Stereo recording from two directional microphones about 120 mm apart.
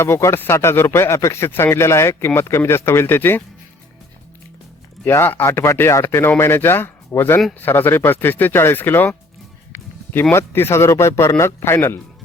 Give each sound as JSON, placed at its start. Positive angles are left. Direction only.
{"t": 0.0, "sound": "speech", "side_deg": 20}
{"t": 5.0, "sound": "speech", "side_deg": 20}
{"t": 9.7, "sound": "music", "side_deg": 20}
{"t": 10.3, "sound": "speech", "side_deg": 20}